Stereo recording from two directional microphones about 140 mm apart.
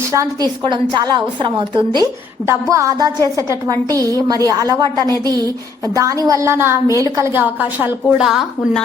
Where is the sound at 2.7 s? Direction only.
20° right (ahead or behind).